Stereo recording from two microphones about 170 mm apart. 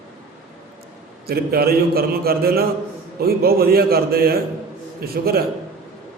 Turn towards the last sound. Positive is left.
turn(degrees=-65)  # may be behind; listen again after turning